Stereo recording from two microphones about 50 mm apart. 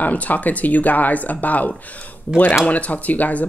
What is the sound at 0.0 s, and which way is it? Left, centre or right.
Speech, left.